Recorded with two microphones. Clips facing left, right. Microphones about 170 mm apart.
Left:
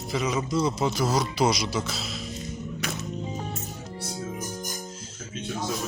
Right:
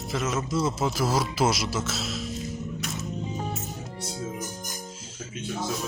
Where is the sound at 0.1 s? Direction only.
Centre (ahead or behind).